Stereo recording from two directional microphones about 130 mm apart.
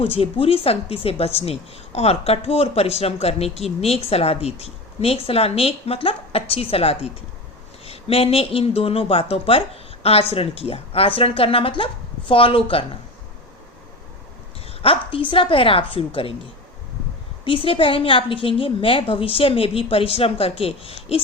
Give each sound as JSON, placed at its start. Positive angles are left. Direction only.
{"t": 0.0, "sound": "a woman's voice", "side_deg": 45}
{"t": 14.7, "sound": "a woman's voice", "side_deg": 45}
{"t": 17.4, "sound": "a woman's voice", "side_deg": 40}